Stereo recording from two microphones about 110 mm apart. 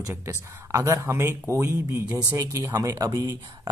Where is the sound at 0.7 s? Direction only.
30° right (ahead or behind).